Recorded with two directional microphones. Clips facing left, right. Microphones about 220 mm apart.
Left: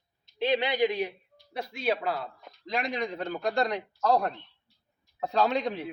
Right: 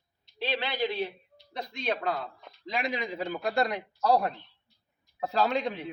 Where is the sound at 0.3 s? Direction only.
20° left (ahead or behind).